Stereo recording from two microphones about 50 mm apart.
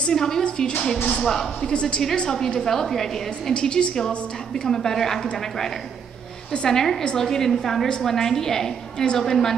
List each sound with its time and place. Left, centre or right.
0.0 s a woman's voice: centre
1.7 s a woman's voice: centre
6.5 s a woman's voice: centre